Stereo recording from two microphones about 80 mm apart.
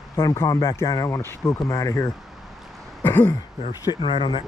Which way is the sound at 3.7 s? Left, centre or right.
Left.